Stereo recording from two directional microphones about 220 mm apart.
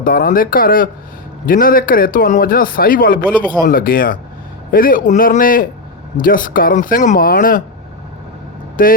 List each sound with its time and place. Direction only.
0.0 s a man's voice: 40° left (ahead or behind)
8.8 s a man's voice: 40° left (ahead or behind)